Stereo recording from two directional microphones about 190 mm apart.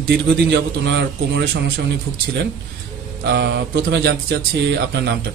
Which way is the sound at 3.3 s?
65° right (ahead or behind).